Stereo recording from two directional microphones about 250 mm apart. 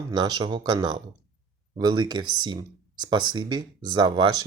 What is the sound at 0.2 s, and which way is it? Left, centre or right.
Speech, centre.